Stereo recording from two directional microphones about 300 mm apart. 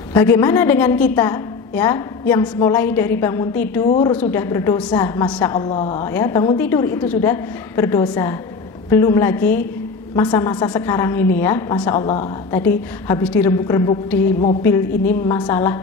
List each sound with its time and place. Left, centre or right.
0.1 s a woman's voice: centre
3.9 s a woman's voice: centre
4.2 s a woman's voice: centre